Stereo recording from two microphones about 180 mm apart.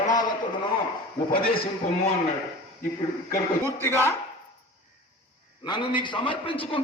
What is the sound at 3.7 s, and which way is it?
Speech, 15° left (ahead or behind).